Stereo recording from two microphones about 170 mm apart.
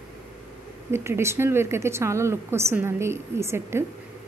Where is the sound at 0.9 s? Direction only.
15° right (ahead or behind).